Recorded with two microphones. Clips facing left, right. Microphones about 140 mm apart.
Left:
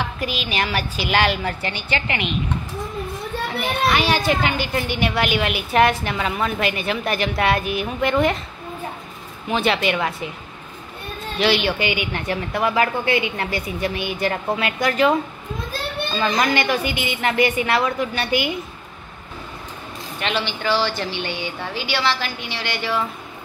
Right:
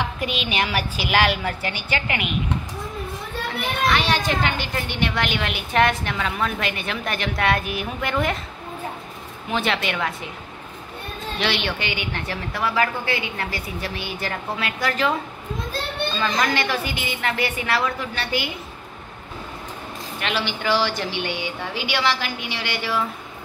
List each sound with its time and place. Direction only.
0.2 s a woman's voice: 20° right (ahead or behind)
0.6 s a woman's voice: 10° right (ahead or behind)
3.9 s a woman's voice: 10° left (ahead or behind)
9.5 s speech: centre (ahead or behind)
11.3 s a woman's voice: 5° left (ahead or behind)
16.2 s a woman's voice: 20° left (ahead or behind)
20.2 s a woman's voice: 5° right (ahead or behind)